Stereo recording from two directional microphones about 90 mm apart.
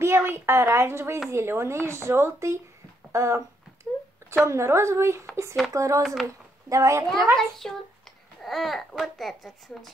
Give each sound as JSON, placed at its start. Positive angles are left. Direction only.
{"t": 0.0, "sound": "a woman's voice", "side_deg": -25}
{"t": 3.1, "sound": "a sound", "side_deg": -30}
{"t": 4.5, "sound": "a woman's voice", "side_deg": -30}
{"t": 7.3, "sound": "a child's voice", "side_deg": 5}